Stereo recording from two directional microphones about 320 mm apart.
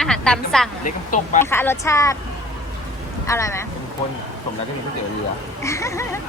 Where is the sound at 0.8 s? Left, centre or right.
Left.